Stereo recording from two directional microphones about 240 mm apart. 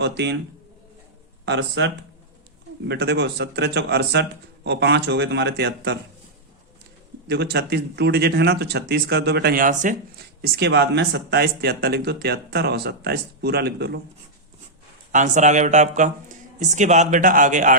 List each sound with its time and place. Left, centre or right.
0.0 s speech: right
1.5 s speech: right
7.3 s speech: right
10.4 s speech: right
15.1 s speech: right